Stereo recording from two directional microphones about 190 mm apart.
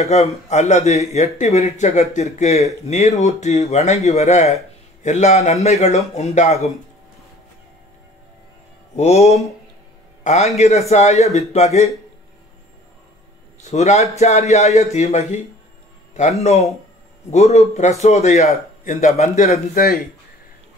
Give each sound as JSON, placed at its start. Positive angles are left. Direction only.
{"t": 0.0, "sound": "speech", "side_deg": 35}
{"t": 8.9, "sound": "a man's voice", "side_deg": 35}
{"t": 13.7, "sound": "a man's voice", "side_deg": 35}